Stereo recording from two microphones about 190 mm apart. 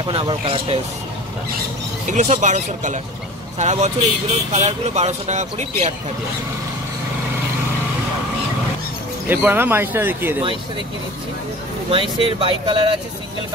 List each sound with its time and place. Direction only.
0.0 s speech: 30° right (ahead or behind)
2.0 s speech: 40° right (ahead or behind)
9.3 s speech: 10° right (ahead or behind)
11.9 s speech: 30° right (ahead or behind)